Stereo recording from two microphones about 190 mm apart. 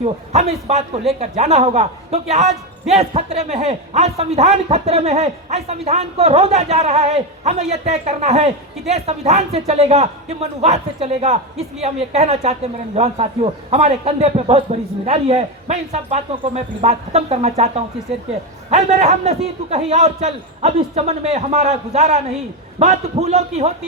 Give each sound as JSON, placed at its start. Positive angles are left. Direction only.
{"t": 0.0, "sound": "a man's voice", "side_deg": -35}